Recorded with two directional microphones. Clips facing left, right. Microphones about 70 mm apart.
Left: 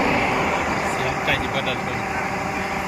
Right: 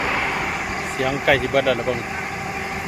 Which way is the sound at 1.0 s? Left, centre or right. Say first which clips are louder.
Right 3 dB; right.